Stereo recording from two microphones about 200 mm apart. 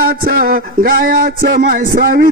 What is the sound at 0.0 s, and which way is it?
A man's voice, 45° right (ahead or behind).